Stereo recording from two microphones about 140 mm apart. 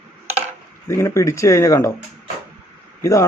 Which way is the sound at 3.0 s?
25° left (ahead or behind).